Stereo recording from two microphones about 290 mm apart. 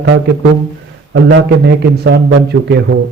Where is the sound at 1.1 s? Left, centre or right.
Right.